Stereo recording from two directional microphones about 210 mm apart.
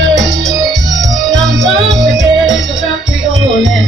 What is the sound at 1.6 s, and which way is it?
Music, 15° right (ahead or behind).